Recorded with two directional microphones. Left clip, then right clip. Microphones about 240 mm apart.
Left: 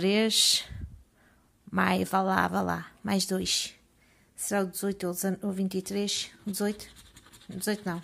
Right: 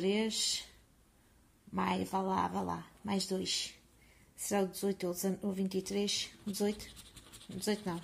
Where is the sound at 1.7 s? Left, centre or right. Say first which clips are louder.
Left 8 dB; left.